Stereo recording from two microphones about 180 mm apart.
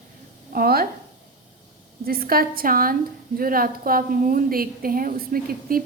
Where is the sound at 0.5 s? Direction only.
55° right (ahead or behind).